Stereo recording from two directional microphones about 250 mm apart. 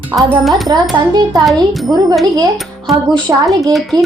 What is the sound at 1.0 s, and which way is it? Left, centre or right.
Speech, centre.